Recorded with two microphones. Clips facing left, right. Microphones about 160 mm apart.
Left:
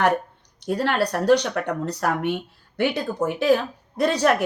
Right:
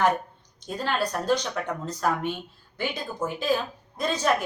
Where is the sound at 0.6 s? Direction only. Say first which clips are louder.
Left 5 dB; 70° left (ahead or behind).